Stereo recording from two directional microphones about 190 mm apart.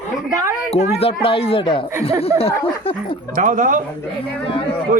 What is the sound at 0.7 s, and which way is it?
Speech, 35° left (ahead or behind).